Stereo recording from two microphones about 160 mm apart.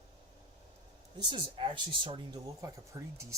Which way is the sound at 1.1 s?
30° right (ahead or behind).